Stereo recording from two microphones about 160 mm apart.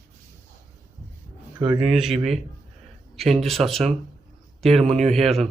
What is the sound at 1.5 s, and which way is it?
Speech, 25° right (ahead or behind).